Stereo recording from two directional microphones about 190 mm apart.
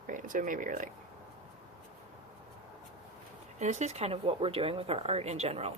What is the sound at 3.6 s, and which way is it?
Speech, 35° right (ahead or behind).